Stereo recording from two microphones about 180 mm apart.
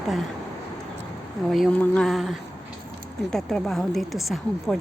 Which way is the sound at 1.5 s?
5° left (ahead or behind).